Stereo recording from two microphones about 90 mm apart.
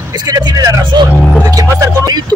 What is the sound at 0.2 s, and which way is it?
Speech, 45° right (ahead or behind).